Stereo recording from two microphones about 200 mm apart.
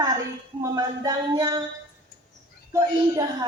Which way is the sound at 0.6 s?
15° right (ahead or behind).